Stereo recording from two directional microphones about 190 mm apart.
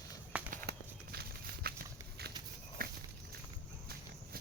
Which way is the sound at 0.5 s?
55° right (ahead or behind).